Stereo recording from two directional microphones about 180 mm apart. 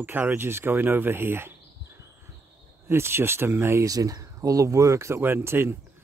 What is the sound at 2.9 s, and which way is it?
Speech, 15° right (ahead or behind).